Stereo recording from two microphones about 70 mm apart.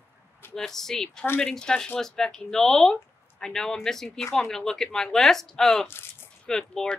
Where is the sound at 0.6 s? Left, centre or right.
Centre.